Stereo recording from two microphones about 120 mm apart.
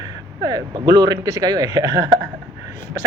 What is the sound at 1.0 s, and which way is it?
Speech, 30° right (ahead or behind).